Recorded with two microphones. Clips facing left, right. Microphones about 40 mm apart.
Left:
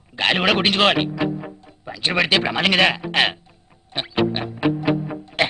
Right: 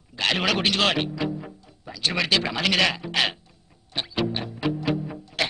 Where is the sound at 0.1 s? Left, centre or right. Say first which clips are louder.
Left 5 dB; left.